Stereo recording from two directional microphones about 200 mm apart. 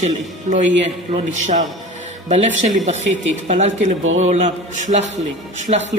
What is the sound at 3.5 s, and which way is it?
A man's voice, 35° right (ahead or behind).